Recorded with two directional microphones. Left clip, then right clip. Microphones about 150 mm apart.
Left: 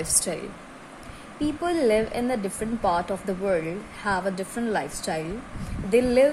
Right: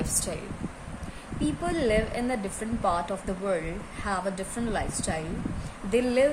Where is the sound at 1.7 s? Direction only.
40° left (ahead or behind).